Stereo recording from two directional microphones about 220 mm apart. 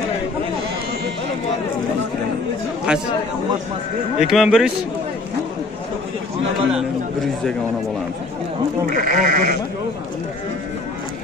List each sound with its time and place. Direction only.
2.9 s speech: 5° right (ahead or behind)
4.2 s speech: centre (ahead or behind)
6.7 s speech: centre (ahead or behind)
8.8 s speech: 35° right (ahead or behind)